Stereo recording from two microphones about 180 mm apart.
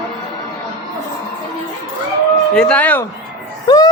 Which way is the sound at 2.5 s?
5° left (ahead or behind).